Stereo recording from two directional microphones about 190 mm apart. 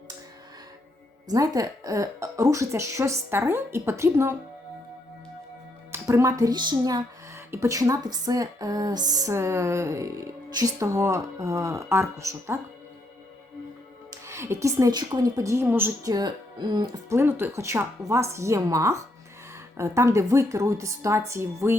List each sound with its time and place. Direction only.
1.3 s speech: 20° right (ahead or behind)
5.9 s speech: 15° right (ahead or behind)
14.1 s speech: 15° right (ahead or behind)